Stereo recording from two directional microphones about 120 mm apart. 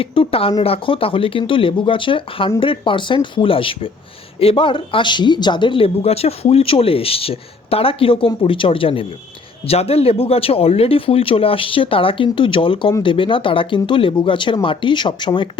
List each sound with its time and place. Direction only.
0.0 s speech: 50° left (ahead or behind)